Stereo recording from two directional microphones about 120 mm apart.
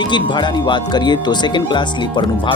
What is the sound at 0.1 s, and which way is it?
Speech, 40° left (ahead or behind).